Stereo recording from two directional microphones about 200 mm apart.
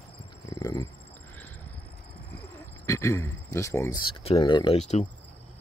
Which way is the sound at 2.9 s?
15° left (ahead or behind).